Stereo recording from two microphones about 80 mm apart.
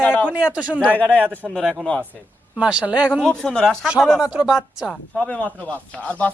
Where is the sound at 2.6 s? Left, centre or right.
Centre.